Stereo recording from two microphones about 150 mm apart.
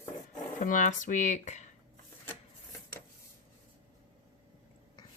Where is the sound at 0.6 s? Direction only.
60° left (ahead or behind).